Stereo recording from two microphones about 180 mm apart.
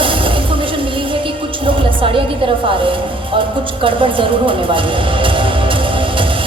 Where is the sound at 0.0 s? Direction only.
30° right (ahead or behind).